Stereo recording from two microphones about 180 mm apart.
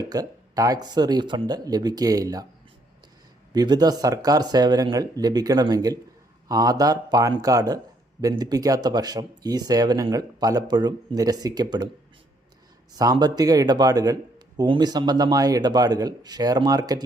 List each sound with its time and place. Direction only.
0.1 s a man's voice: 20° right (ahead or behind)
3.5 s a man's voice: 20° right (ahead or behind)
12.9 s a man's voice: 20° right (ahead or behind)